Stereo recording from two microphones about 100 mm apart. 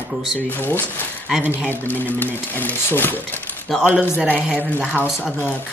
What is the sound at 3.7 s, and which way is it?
Speech, centre (ahead or behind).